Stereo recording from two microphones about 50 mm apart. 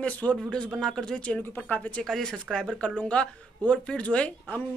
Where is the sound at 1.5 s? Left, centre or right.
Left.